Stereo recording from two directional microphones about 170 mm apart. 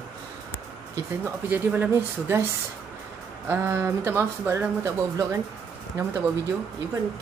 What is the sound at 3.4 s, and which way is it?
Speech, 15° right (ahead or behind).